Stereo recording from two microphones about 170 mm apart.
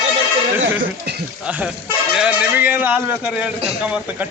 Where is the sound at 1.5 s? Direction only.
5° right (ahead or behind).